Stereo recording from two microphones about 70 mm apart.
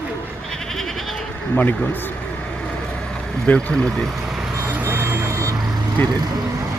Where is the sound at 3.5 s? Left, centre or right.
Centre.